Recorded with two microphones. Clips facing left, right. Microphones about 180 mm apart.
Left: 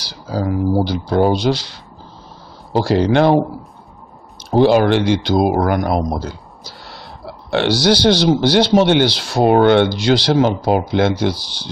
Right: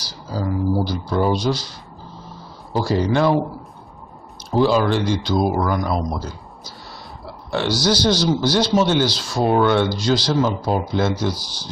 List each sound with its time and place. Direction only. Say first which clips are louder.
0.0 s a sound: left 4 dB; 70° left (ahead or behind)
0.8 s speech: left 5 dB; 70° left (ahead or behind)
4.5 s speech: left 5 dB; 65° left (ahead or behind)